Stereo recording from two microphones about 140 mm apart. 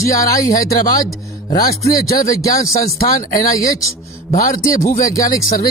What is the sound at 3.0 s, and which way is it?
Speech, 85° left.